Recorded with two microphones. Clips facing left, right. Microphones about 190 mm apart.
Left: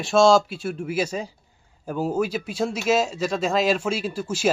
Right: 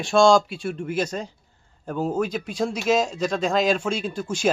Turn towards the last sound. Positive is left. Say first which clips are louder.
# even
turn(degrees=5)  # may be behind; listen again after turning